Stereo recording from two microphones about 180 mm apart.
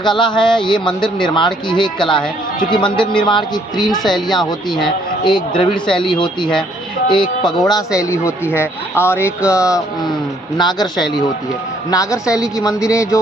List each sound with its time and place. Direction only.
0.0 s a man's voice: 25° left (ahead or behind)
5.2 s a man's voice: 25° left (ahead or behind)
11.9 s a man's voice: 20° left (ahead or behind)